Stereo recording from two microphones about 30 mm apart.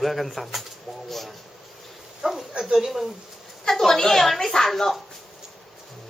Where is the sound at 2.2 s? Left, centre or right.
Right.